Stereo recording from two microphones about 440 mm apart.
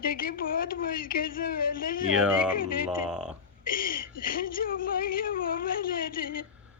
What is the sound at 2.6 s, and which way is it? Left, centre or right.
Speech, centre.